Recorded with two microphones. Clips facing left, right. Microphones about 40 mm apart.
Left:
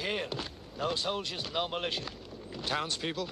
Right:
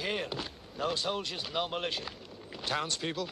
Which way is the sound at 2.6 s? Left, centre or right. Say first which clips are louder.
Even; centre.